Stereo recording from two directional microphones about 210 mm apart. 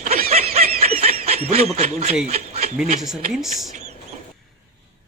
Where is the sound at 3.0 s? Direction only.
Centre (ahead or behind).